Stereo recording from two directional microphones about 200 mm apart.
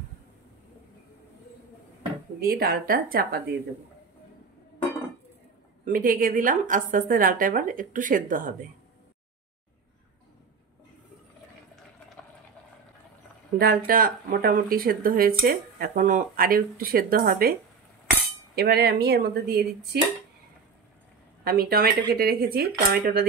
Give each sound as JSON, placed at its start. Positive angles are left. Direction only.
{"t": 2.4, "sound": "a woman's voice", "side_deg": -50}
{"t": 5.9, "sound": "a woman's voice", "side_deg": -45}
{"t": 13.6, "sound": "a woman's voice", "side_deg": -45}
{"t": 21.5, "sound": "a woman's voice", "side_deg": -50}